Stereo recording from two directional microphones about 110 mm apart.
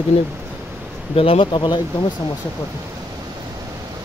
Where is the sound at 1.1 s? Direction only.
60° left (ahead or behind).